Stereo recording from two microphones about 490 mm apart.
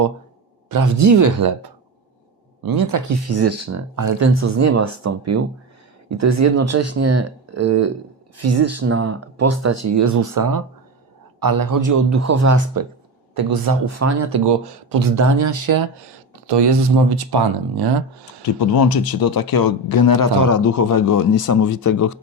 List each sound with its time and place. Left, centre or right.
0.7 s speech: right
14.4 s speech: right
15.1 s speech: right
16.5 s speech: right
18.9 s a man's voice: left